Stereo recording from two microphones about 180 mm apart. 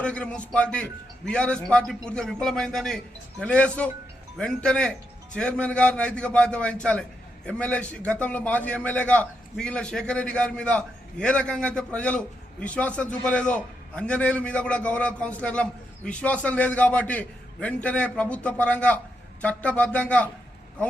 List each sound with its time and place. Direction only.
0.0 s a man's voice: 5° left (ahead or behind)